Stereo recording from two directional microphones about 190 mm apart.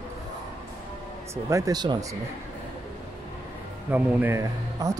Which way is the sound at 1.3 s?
20° right (ahead or behind).